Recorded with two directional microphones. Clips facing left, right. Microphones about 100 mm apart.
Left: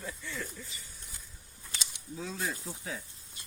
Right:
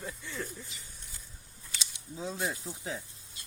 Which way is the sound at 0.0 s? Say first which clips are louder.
Right 1 dB; 20° right (ahead or behind).